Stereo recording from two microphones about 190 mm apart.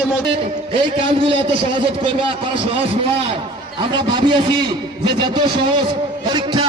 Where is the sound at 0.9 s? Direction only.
25° right (ahead or behind).